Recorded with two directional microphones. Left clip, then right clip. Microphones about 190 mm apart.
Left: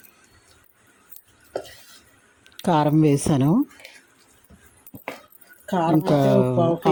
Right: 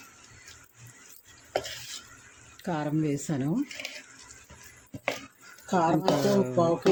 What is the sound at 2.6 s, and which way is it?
Speech, 35° left (ahead or behind).